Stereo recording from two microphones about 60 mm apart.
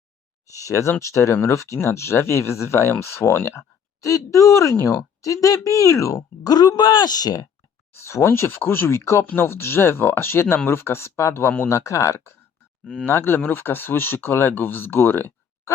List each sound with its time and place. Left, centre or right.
0.5 s a woman's voice: left
4.0 s a woman's voice: left
7.2 s speech: left
7.9 s speech: left
9.2 s speech: left
11.7 s a woman's voice: left
12.8 s speech: centre
13.1 s speech: left